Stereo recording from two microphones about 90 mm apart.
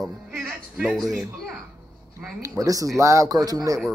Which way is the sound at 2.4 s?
40° right (ahead or behind).